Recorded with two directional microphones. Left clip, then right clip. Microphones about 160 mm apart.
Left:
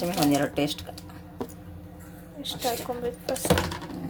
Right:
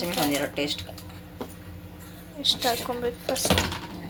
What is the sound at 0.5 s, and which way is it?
Speech, 75° left (ahead or behind).